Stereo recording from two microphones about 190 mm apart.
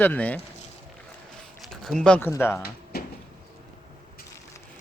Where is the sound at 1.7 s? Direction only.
Centre (ahead or behind).